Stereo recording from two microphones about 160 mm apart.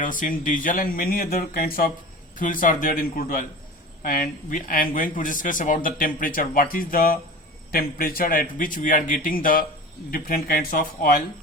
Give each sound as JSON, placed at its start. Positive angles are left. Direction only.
{"t": 0.0, "sound": "speech", "side_deg": 55}